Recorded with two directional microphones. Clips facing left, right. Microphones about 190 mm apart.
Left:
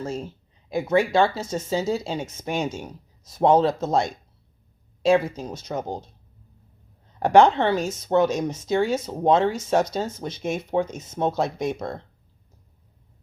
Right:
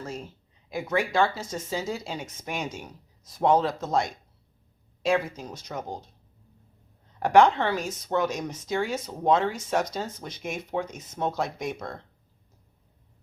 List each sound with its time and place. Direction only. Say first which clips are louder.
0.0 s speech: left 6 dB; 25° left (ahead or behind)
7.2 s speech: left 3 dB; 25° left (ahead or behind)